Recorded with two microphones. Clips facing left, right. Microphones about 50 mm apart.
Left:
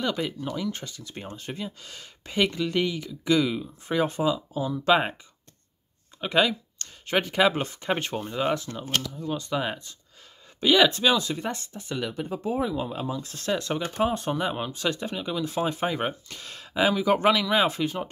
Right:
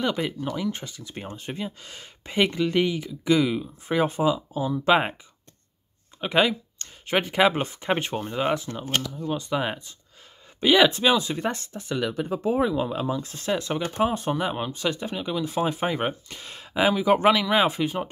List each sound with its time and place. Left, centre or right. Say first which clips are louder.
0.0 s speech: right 2 dB; centre
6.2 s speech: right 1 dB; centre
11.5 s speech: right 3 dB; right
12.5 s speech: right 3 dB; right
13.4 s speech: left 1 dB; centre